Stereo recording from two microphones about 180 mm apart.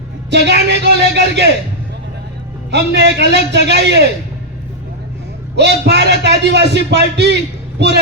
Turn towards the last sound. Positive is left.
turn(degrees=-70)  # may be behind; listen again after turning